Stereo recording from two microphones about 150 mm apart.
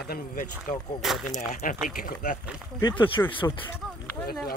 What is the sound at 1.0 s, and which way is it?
Speech, centre (ahead or behind).